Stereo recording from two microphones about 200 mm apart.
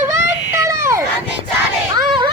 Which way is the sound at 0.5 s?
15° right (ahead or behind).